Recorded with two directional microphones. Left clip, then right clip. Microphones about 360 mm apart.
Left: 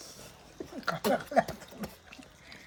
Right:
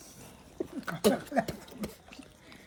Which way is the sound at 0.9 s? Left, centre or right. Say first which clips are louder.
Even; left.